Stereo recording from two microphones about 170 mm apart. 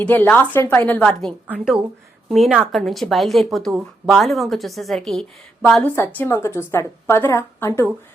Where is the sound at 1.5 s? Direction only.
5° right (ahead or behind).